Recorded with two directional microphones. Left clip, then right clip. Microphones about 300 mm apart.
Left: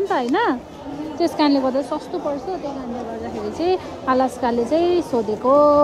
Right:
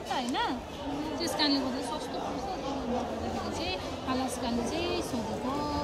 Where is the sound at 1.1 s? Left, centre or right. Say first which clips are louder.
Left 11 dB; centre.